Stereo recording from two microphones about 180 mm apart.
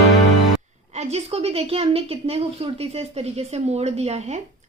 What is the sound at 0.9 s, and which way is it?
A woman's voice, 35° right (ahead or behind).